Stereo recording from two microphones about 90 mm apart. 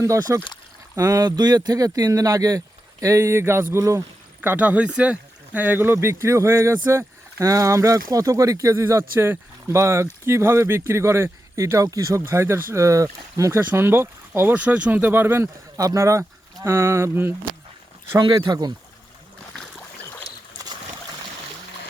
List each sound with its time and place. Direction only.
0.0 s speech: 40° right (ahead or behind)
4.4 s speech: 20° right (ahead or behind)
15.8 s speech: 35° right (ahead or behind)
18.2 s speech: 55° right (ahead or behind)